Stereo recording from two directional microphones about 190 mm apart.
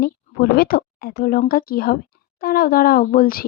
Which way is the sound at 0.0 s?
55° left (ahead or behind).